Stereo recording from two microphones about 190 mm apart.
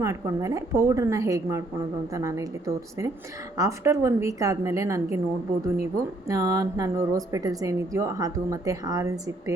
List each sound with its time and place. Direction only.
0.0 s a woman's voice: 15° right (ahead or behind)
6.2 s a woman's voice: 15° right (ahead or behind)